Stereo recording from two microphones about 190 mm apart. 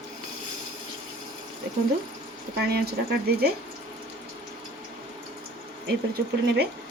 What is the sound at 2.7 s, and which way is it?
Speech, 55° right (ahead or behind).